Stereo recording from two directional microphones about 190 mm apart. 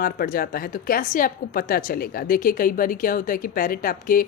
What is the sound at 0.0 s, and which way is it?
Speech, 50° left (ahead or behind).